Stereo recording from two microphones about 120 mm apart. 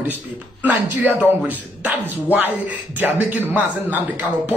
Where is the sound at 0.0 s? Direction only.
15° right (ahead or behind).